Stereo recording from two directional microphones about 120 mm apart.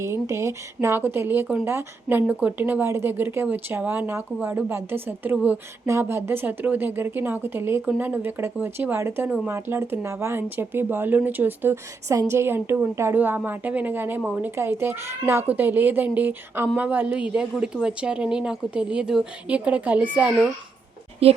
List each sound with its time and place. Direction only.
0.0 s speech: 25° right (ahead or behind)
21.2 s a woman's voice: 55° right (ahead or behind)